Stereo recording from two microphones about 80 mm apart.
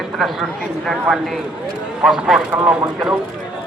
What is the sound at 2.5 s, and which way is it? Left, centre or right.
Speech, centre.